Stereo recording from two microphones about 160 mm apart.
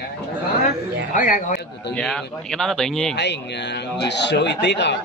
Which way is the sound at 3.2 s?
90° left.